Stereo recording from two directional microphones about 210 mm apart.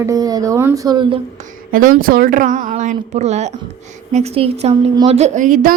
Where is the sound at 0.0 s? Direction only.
15° right (ahead or behind).